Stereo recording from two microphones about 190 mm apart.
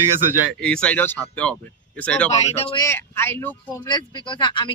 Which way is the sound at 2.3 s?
30° left (ahead or behind).